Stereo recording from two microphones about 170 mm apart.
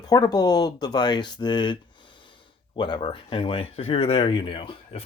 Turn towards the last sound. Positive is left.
turn(degrees=35)  # may be behind; listen again after turning